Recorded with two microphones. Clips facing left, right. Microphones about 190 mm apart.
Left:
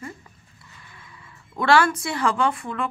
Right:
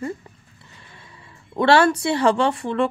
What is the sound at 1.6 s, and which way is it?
Speech, 30° right (ahead or behind).